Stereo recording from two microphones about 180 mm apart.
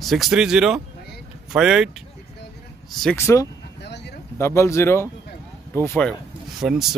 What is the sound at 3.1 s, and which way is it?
Speech, 15° left (ahead or behind).